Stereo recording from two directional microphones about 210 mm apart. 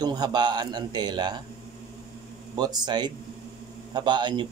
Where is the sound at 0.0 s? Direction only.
20° right (ahead or behind).